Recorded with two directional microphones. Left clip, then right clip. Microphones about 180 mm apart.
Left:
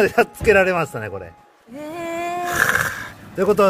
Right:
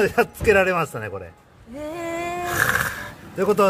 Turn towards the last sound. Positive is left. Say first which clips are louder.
# left 2 dB
turn(degrees=20)  # may be behind; listen again after turning